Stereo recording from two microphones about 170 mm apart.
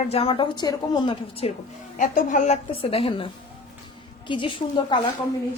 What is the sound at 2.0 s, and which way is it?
A woman's voice, 50° left (ahead or behind).